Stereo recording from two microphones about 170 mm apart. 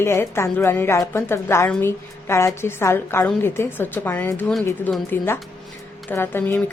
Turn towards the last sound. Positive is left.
turn(degrees=10)  # may be behind; listen again after turning